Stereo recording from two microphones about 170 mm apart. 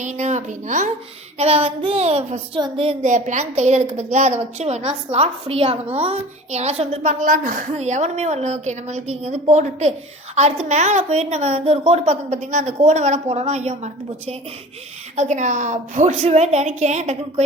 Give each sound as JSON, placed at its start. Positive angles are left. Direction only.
{"t": 0.0, "sound": "a woman's voice", "side_deg": -45}
{"t": 1.4, "sound": "a woman's voice", "side_deg": -35}